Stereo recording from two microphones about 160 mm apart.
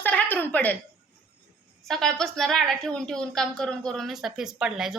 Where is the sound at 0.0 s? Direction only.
10° left (ahead or behind).